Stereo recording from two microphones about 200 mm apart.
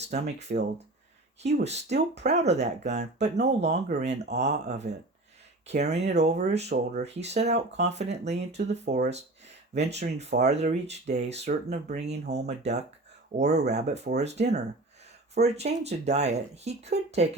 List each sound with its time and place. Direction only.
0.0 s speech: 35° right (ahead or behind)
1.6 s speech: 35° right (ahead or behind)